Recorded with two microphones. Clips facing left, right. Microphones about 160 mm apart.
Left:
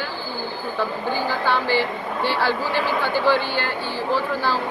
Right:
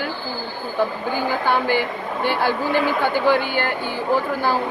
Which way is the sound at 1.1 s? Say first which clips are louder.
Even; 50° right (ahead or behind).